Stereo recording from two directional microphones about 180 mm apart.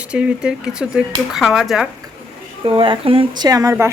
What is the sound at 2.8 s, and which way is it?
Speech, 30° right (ahead or behind).